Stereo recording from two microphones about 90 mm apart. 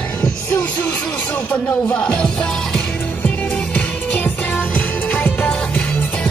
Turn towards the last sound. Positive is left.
turn(degrees=15)  # may be behind; listen again after turning